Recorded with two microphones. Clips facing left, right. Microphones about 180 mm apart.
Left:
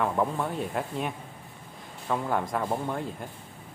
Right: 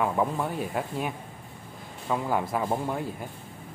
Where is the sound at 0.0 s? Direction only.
5° right (ahead or behind).